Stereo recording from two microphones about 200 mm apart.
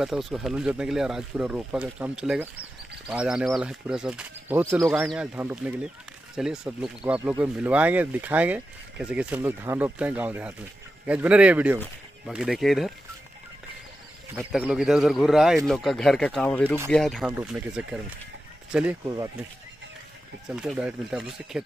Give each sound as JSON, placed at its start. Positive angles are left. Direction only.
{"t": 0.0, "sound": "speech", "side_deg": 0}
{"t": 14.3, "sound": "speech", "side_deg": -5}
{"t": 19.0, "sound": "speech", "side_deg": -20}
{"t": 20.4, "sound": "speech", "side_deg": -5}